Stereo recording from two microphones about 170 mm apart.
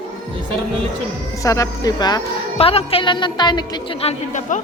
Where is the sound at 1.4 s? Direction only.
20° left (ahead or behind).